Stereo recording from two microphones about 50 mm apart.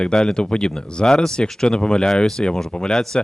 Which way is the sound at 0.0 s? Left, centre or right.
Centre.